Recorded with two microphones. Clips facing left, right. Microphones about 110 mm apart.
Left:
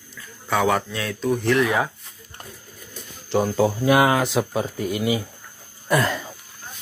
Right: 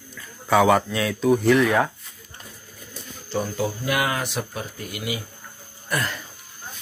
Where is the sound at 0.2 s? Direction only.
Centre (ahead or behind).